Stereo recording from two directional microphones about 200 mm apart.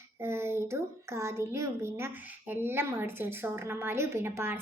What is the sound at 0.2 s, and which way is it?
A woman's voice, 15° right (ahead or behind).